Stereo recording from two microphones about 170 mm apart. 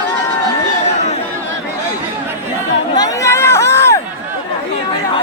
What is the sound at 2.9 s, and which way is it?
Chatter, 20° left (ahead or behind).